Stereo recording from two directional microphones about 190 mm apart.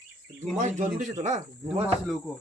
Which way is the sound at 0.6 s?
40° right (ahead or behind).